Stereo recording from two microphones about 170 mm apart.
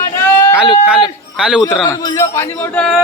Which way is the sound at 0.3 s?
10° left (ahead or behind).